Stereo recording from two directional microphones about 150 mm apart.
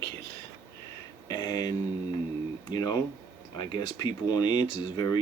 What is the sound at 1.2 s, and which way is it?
Speech, 25° left (ahead or behind).